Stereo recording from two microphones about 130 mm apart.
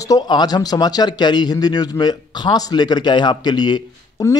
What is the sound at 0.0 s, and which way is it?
Speech, 30° left (ahead or behind).